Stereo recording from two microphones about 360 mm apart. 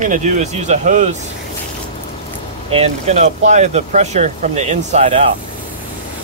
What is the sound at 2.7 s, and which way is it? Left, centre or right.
Speech, centre.